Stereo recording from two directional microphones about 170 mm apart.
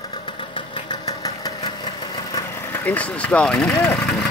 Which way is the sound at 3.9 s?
5° left (ahead or behind).